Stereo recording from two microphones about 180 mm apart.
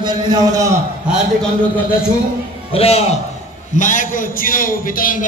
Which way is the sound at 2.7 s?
35° left (ahead or behind).